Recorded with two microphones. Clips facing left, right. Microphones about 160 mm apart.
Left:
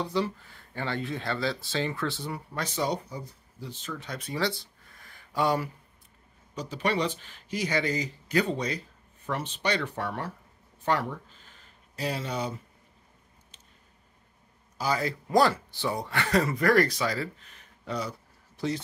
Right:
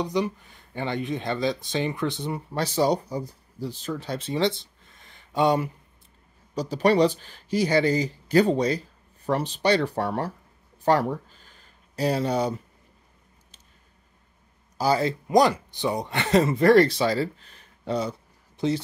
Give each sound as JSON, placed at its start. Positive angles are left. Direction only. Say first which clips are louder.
{"t": 0.0, "sound": "speech", "louder": "right 3 dB", "side_deg": -15}
{"t": 6.5, "sound": "speech", "louder": "right 8 dB", "side_deg": -35}
{"t": 14.8, "sound": "speech", "louder": "right 6 dB", "side_deg": -30}
{"t": 15.2, "sound": "speech", "louder": "right 3 dB", "side_deg": -15}